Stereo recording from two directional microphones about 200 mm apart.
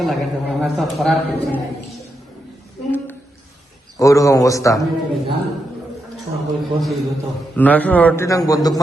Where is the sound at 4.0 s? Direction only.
15° left (ahead or behind).